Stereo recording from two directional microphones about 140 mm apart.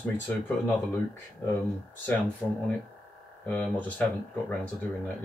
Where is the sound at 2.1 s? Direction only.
5° left (ahead or behind).